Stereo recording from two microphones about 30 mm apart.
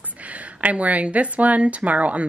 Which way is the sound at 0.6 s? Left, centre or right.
Right.